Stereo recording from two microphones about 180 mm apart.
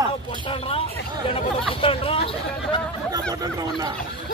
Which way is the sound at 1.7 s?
30° left (ahead or behind).